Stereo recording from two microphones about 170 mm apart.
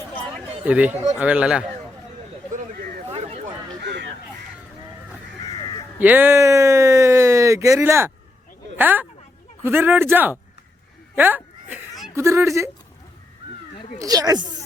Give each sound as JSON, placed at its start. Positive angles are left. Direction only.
{"t": 0.6, "sound": "speech", "side_deg": -10}
{"t": 2.5, "sound": "a sound", "side_deg": -50}
{"t": 3.1, "sound": "a sound", "side_deg": -35}
{"t": 3.8, "sound": "fowl", "side_deg": -90}
{"t": 5.5, "sound": "crow", "side_deg": 25}
{"t": 6.0, "sound": "speech", "side_deg": -10}
{"t": 11.1, "sound": "a sound", "side_deg": -10}
{"t": 12.1, "sound": "speech", "side_deg": -15}
{"t": 14.0, "sound": "speech", "side_deg": -20}